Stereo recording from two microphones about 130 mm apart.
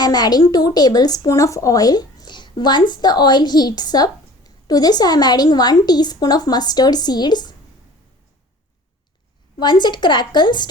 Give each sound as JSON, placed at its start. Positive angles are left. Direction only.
{"t": 0.0, "sound": "a woman's voice", "side_deg": 30}
{"t": 9.6, "sound": "a woman's voice", "side_deg": 35}